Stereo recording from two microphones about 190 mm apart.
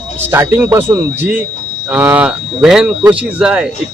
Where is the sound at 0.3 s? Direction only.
15° right (ahead or behind).